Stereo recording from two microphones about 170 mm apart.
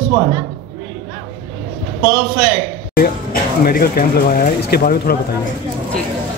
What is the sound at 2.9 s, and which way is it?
Speech, 60° left (ahead or behind).